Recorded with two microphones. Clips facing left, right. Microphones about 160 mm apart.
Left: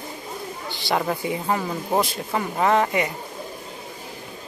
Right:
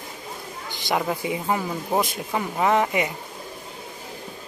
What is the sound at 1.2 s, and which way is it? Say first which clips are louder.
Speech: left 1 dB; 15° right (ahead or behind).